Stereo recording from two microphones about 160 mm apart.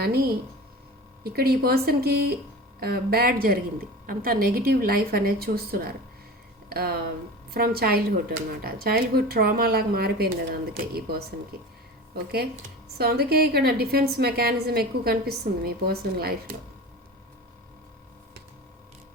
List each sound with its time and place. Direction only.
0.0 s a woman's voice: 75° right (ahead or behind)
13.0 s a woman's voice: 75° right (ahead or behind)